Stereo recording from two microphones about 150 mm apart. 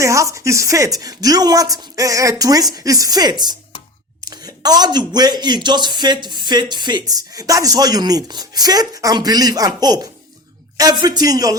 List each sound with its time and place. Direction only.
0.0 s speech: 20° right (ahead or behind)